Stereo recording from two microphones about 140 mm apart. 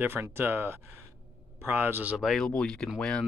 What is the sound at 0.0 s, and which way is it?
Speech, 15° right (ahead or behind).